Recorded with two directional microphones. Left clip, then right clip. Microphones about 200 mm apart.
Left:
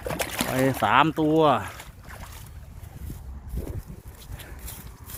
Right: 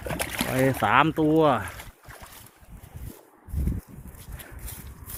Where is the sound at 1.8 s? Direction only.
55° right (ahead or behind).